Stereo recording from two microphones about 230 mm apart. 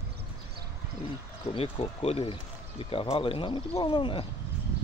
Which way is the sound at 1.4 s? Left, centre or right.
Left.